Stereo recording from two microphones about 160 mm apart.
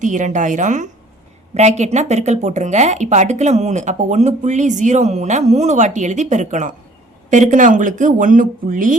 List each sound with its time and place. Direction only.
0.0 s speech: 50° right (ahead or behind)